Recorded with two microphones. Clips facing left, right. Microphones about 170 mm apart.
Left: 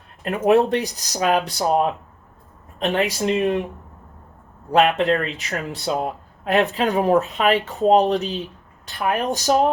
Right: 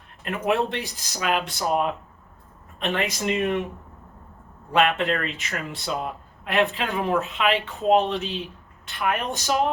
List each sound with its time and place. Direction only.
0.3 s speech: 40° left (ahead or behind)
4.7 s speech: 40° left (ahead or behind)